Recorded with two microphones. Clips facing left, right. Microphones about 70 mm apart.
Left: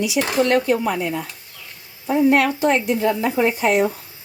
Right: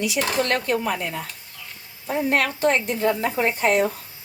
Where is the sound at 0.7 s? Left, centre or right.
Left.